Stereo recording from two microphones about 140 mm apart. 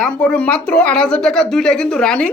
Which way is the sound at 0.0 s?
5° left (ahead or behind).